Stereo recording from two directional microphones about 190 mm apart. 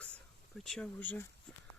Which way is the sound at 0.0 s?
5° left (ahead or behind).